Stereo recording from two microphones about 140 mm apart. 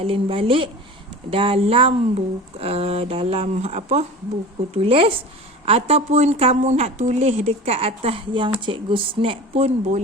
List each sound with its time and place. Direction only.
0.0 s a woman's voice: 40° right (ahead or behind)